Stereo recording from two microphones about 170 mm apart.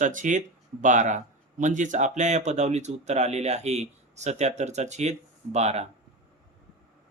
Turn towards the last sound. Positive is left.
turn(degrees=-40)  # may be behind; listen again after turning